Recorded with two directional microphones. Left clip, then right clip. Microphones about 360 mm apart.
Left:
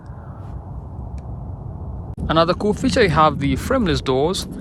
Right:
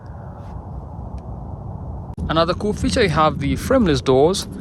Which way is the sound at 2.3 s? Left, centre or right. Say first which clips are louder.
Left 2 dB; centre.